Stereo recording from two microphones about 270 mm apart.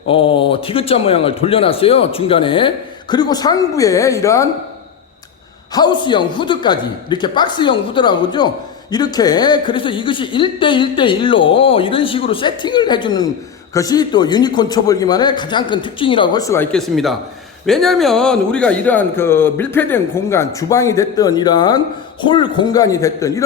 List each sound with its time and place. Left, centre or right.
0.3 s a man's voice: centre
5.7 s speech: centre